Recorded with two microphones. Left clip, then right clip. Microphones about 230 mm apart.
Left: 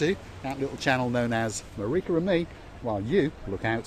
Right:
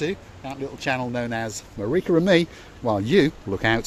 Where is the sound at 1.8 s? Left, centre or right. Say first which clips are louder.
Right 6 dB; right.